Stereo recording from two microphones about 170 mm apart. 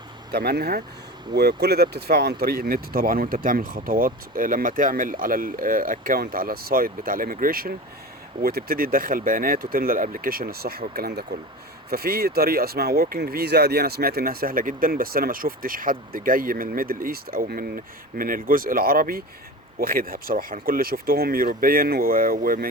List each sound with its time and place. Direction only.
0.3 s speech: 65° right (ahead or behind)